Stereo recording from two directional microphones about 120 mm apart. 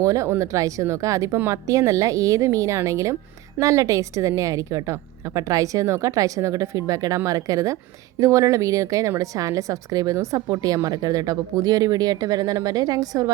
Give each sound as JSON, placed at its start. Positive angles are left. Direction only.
{"t": 0.0, "sound": "a woman's voice", "side_deg": -25}